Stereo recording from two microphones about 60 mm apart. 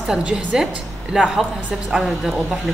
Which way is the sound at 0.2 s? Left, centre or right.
Right.